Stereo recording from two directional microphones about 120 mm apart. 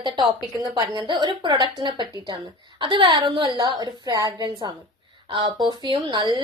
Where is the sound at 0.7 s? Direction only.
40° right (ahead or behind).